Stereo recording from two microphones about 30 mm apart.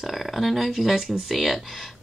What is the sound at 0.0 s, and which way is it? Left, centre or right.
Speech, centre.